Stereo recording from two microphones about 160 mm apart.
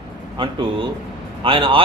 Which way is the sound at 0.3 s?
30° right (ahead or behind).